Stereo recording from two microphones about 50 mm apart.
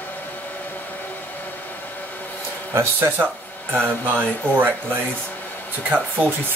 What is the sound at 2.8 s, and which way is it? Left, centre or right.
Speech, right.